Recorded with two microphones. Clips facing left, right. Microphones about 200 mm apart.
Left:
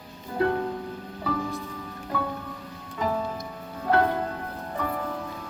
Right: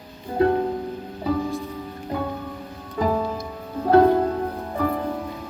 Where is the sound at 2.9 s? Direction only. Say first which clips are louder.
Right 5 dB; 35° right (ahead or behind).